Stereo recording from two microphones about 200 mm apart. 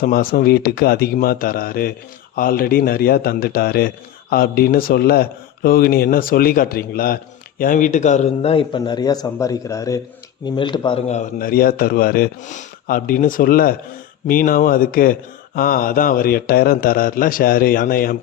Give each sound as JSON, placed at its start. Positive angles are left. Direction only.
{"t": 0.0, "sound": "a man's voice", "side_deg": 45}